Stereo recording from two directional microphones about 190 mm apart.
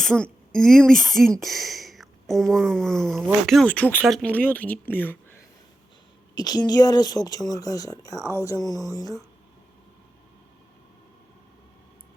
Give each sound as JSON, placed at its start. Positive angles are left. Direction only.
{"t": 0.0, "sound": "speech", "side_deg": 5}
{"t": 6.3, "sound": "a woman's voice", "side_deg": 20}